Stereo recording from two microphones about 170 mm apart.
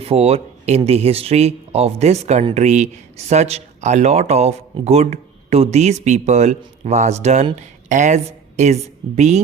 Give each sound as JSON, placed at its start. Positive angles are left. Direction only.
{"t": 0.0, "sound": "a woman's voice", "side_deg": -35}